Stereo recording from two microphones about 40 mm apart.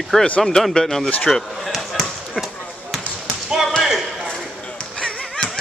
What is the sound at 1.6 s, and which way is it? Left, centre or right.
Basketball bounce, centre.